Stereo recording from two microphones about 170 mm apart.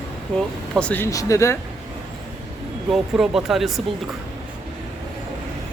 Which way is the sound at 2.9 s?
5° right (ahead or behind).